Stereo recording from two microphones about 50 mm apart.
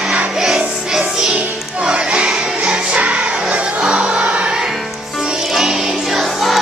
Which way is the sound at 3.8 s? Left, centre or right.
Right.